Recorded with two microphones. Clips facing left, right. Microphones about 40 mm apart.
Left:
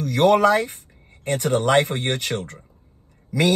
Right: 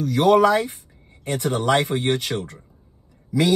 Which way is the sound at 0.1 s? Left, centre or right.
Left.